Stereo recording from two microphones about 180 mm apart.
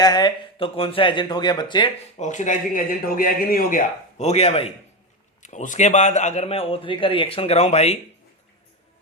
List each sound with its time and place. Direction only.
0.0 s speech: 25° left (ahead or behind)
2.1 s a man's voice: 40° left (ahead or behind)